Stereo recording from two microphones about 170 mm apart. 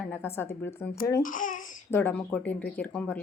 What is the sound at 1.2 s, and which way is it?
Speech, 50° left (ahead or behind).